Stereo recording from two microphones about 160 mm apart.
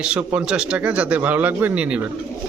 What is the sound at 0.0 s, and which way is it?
A man's voice, 10° right (ahead or behind).